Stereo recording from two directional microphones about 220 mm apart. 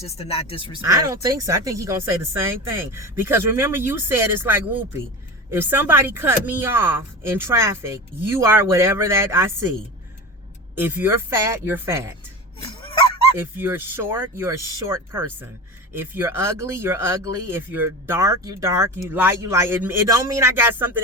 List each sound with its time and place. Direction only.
0.0 s speech: 25° left (ahead or behind)
1.2 s speech: 15° right (ahead or behind)
10.8 s speech: 10° right (ahead or behind)
12.6 s honk: 25° left (ahead or behind)
13.4 s speech: 10° right (ahead or behind)